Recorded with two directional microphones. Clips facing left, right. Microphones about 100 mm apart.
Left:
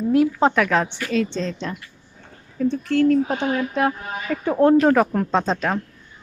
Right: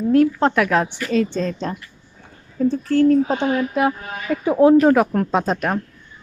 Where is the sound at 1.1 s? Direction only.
45° right (ahead or behind).